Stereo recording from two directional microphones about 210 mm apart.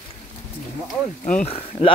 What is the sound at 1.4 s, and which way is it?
Speech, 30° left (ahead or behind).